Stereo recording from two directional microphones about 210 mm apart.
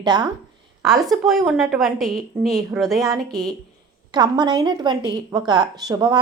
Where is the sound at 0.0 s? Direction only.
20° right (ahead or behind).